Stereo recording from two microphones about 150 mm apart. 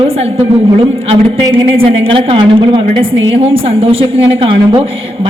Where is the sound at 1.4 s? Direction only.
35° right (ahead or behind).